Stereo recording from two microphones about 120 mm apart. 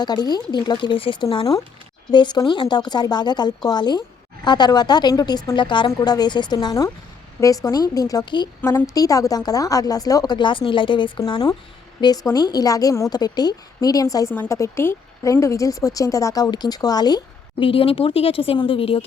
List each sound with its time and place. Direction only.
0.0 s a woman's voice: 35° left (ahead or behind)
8.6 s a woman's voice: 25° left (ahead or behind)
17.7 s speech: 50° left (ahead or behind)